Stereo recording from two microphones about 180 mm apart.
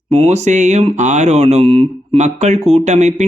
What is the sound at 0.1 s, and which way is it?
Speech, 35° right (ahead or behind).